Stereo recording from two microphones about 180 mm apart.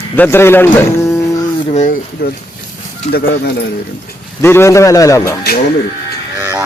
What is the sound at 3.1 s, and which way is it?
Speech, 60° left (ahead or behind).